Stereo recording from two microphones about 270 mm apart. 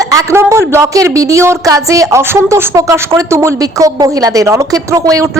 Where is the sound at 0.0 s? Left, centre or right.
Centre.